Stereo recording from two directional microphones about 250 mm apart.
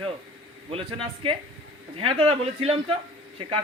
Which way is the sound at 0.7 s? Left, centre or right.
Right.